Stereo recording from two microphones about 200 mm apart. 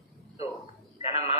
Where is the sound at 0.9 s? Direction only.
30° left (ahead or behind).